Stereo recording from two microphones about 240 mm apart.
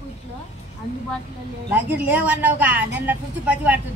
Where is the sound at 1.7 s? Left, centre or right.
Centre.